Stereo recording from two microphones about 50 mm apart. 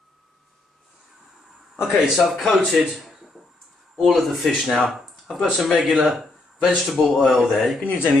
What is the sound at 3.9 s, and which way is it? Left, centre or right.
Speech, centre.